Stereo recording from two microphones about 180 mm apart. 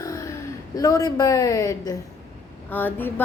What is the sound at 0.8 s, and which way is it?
A woman's voice, 20° left (ahead or behind).